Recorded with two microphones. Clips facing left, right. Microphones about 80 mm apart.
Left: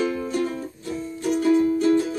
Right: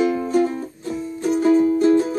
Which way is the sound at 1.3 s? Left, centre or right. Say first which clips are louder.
Right 3 dB; right.